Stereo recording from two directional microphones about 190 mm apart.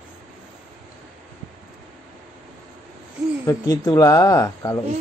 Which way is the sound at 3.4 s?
20° left (ahead or behind).